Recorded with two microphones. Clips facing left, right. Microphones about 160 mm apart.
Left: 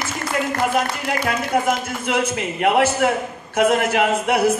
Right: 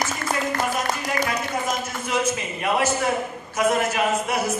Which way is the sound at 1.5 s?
65° left (ahead or behind).